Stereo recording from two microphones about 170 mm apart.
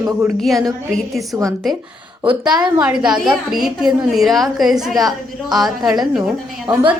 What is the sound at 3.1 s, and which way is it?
A woman's voice, 5° right (ahead or behind).